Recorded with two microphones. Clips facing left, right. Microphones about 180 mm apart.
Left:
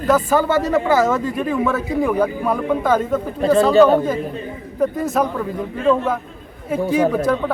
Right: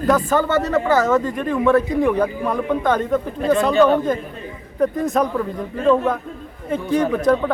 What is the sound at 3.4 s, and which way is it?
Speech, 35° left (ahead or behind).